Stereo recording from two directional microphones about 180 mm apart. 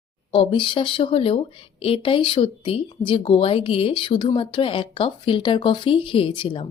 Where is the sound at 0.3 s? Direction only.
25° left (ahead or behind).